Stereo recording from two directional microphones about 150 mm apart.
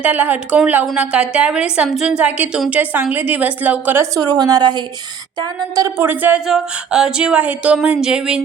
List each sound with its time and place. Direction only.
0.0 s a woman's voice: 10° right (ahead or behind)
4.3 s a woman's voice: 25° right (ahead or behind); by 8.4 s 5° right (ahead or behind)